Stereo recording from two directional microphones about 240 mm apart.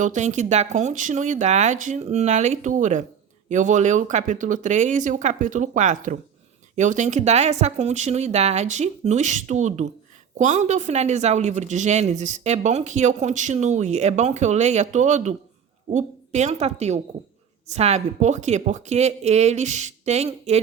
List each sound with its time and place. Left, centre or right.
0.0 s speech: right